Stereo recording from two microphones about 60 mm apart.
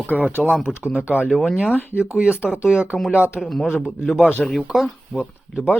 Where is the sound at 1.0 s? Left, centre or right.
Right.